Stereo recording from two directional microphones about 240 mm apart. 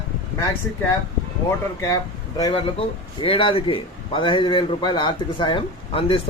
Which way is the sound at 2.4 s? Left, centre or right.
Centre.